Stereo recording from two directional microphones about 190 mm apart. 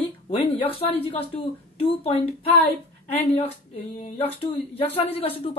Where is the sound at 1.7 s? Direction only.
30° left (ahead or behind).